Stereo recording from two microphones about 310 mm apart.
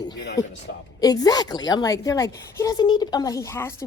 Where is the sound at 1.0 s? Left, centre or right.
Centre.